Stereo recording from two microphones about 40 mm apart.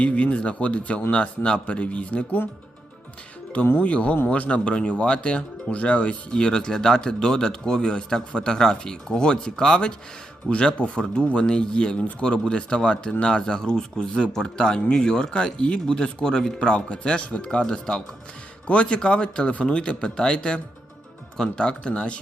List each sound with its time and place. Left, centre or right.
0.0 s speech: left
3.8 s speech: left
6.4 s speech: left
16.6 s speech: left
17.6 s speech: centre
18.7 s speech: left